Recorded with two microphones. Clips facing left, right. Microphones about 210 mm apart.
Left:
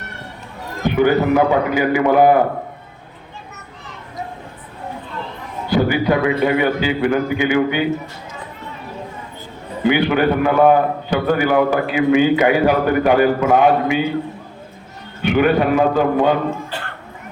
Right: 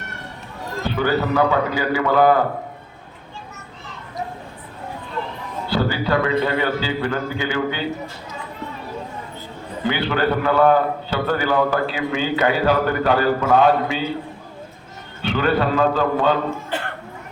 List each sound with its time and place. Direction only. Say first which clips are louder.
0.8 s a man's voice: left 6 dB; 15° left (ahead or behind)
5.6 s a man's voice: left 5 dB; 15° left (ahead or behind)
9.8 s a man's voice: left 5 dB; 15° left (ahead or behind)
15.2 s a man's voice: left 5 dB; 15° left (ahead or behind)